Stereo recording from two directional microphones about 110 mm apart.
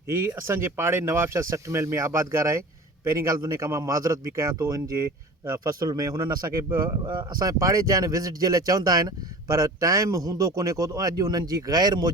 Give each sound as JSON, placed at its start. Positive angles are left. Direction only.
{"t": 0.1, "sound": "speech", "side_deg": -25}